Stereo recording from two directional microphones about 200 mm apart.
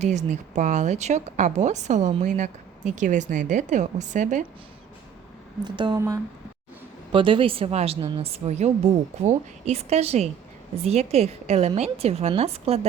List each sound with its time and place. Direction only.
0.0 s a woman's voice: 35° right (ahead or behind)
5.6 s speech: 25° right (ahead or behind)
7.1 s a woman's voice: 25° right (ahead or behind)